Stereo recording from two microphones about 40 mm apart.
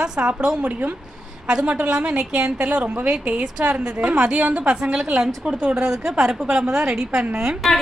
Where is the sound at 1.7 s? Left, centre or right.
Right.